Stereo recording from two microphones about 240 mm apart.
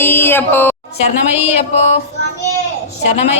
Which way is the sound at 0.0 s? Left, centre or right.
Centre.